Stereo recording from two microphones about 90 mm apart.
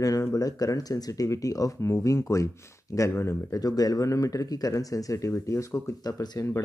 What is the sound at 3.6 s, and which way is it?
Speech, 45° left (ahead or behind).